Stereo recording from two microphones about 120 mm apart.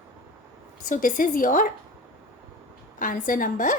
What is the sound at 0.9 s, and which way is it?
Speech, 90° left.